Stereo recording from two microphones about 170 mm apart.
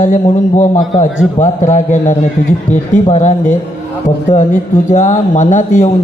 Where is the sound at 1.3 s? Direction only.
45° left (ahead or behind).